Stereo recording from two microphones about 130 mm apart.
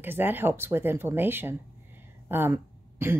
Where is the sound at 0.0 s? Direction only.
15° right (ahead or behind).